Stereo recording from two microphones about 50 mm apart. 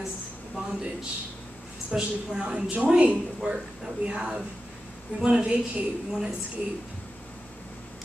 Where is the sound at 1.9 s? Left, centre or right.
Centre.